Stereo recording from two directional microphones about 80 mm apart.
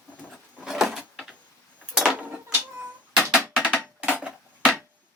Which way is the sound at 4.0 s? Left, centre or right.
Centre.